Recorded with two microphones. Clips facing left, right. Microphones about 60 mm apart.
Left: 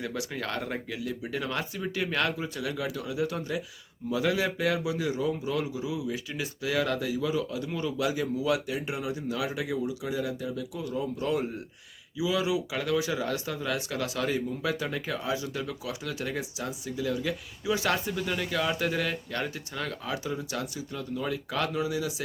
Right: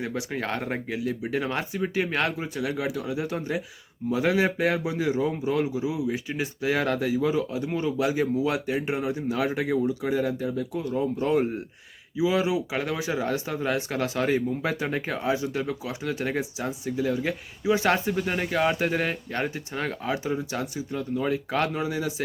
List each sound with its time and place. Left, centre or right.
0.0 s speech: right